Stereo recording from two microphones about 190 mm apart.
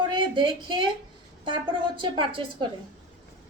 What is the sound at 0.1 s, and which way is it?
A woman's voice, 25° right (ahead or behind).